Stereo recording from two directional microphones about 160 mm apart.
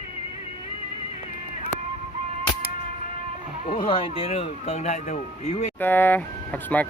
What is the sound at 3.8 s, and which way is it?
Speech, 35° left (ahead or behind).